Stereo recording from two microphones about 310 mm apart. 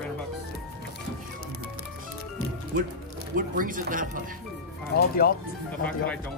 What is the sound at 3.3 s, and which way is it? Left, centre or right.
Speech, right.